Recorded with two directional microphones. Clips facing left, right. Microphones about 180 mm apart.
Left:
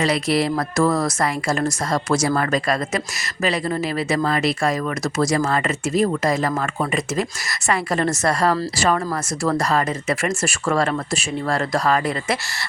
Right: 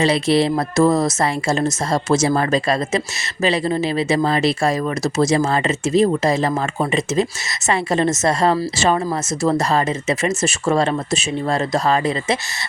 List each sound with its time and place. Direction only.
0.0 s speech: 25° right (ahead or behind)